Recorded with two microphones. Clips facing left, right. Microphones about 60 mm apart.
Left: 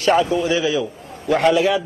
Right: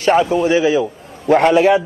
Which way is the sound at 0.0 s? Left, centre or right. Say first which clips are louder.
Right 3 dB; right.